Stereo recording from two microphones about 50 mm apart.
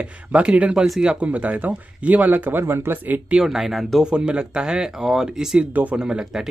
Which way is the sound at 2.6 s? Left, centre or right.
Right.